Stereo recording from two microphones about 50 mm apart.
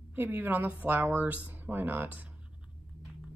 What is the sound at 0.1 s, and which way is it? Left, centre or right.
Speech, right.